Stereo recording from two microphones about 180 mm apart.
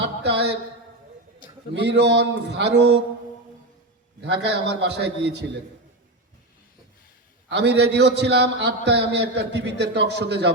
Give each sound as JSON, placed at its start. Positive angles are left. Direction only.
{"t": 0.2, "sound": "speech", "side_deg": -70}
{"t": 1.7, "sound": "a man's voice", "side_deg": -70}
{"t": 4.2, "sound": "a man's voice", "side_deg": -70}
{"t": 7.5, "sound": "a man's voice", "side_deg": -70}